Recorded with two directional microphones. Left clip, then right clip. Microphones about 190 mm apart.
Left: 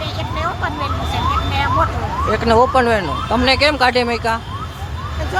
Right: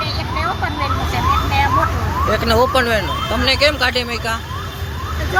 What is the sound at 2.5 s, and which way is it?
Speech, 15° left (ahead or behind).